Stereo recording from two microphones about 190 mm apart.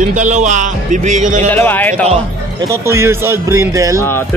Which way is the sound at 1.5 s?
10° left (ahead or behind).